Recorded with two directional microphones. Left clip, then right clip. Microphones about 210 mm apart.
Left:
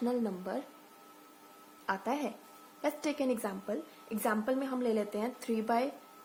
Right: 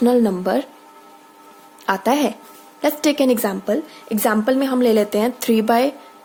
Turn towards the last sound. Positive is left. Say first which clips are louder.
# right 15 dB
turn(degrees=-40)  # may be behind; listen again after turning